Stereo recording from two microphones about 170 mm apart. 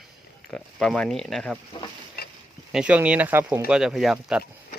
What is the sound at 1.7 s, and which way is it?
Frying, 25° left (ahead or behind).